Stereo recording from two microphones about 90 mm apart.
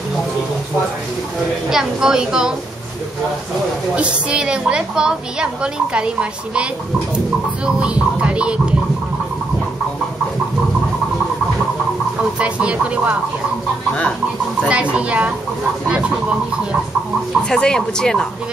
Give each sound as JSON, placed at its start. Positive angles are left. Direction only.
{"t": 1.7, "sound": "a woman's voice", "side_deg": -5}
{"t": 3.9, "sound": "a woman's voice", "side_deg": -10}
{"t": 7.6, "sound": "a woman's voice", "side_deg": -10}
{"t": 12.4, "sound": "a woman's voice", "side_deg": -15}
{"t": 14.7, "sound": "a woman's voice", "side_deg": -15}
{"t": 17.5, "sound": "speech", "side_deg": 10}